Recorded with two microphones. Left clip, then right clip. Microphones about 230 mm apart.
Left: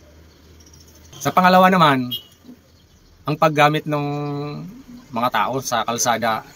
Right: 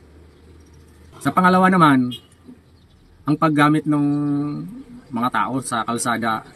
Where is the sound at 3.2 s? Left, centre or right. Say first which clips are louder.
Left 2 dB; centre.